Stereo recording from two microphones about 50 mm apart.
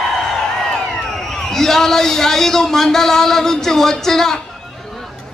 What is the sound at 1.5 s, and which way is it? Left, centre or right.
Speech, centre.